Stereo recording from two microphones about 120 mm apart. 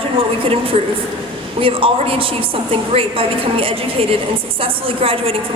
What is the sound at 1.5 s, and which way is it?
A woman's voice, 50° right (ahead or behind).